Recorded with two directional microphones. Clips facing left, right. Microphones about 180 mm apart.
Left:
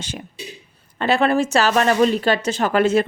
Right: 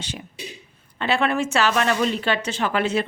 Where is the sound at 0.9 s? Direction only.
40° left (ahead or behind).